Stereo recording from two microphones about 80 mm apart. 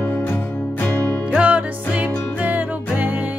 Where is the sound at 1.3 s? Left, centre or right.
Centre.